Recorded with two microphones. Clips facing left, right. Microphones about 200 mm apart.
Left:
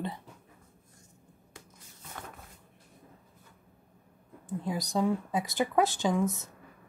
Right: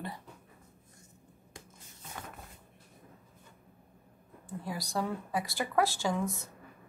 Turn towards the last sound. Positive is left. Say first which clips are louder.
# left 4 dB
turn(degrees=20)  # may be behind; listen again after turning